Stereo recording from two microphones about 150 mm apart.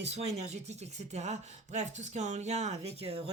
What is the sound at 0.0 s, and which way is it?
Speech, 45° right (ahead or behind).